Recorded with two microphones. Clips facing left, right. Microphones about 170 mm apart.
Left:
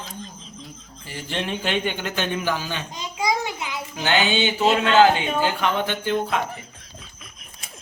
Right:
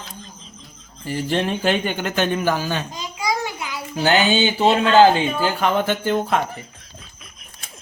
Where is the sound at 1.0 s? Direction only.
40° right (ahead or behind).